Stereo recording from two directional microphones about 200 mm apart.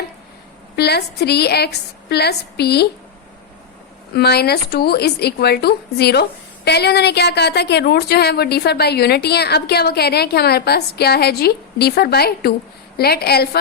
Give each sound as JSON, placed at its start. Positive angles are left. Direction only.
{"t": 0.8, "sound": "a woman's voice", "side_deg": 55}
{"t": 4.1, "sound": "a woman's voice", "side_deg": 55}